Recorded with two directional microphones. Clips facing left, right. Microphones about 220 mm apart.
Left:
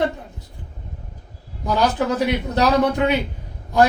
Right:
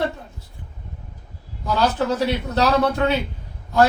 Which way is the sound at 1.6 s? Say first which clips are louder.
Left 1 dB; 15° left (ahead or behind).